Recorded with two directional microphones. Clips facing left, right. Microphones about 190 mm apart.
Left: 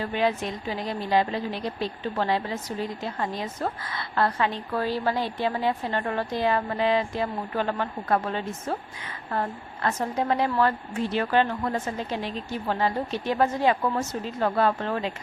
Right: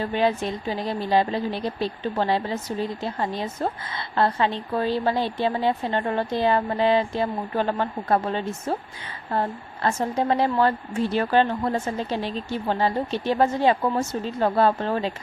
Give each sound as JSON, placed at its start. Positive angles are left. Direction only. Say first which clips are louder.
{"t": 0.0, "sound": "a woman's voice", "louder": "right 3 dB", "side_deg": -30}